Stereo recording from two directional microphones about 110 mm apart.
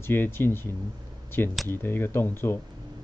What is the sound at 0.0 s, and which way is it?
Speech, 20° left (ahead or behind).